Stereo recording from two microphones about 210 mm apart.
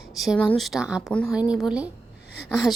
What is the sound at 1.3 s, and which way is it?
Speech, 5° right (ahead or behind).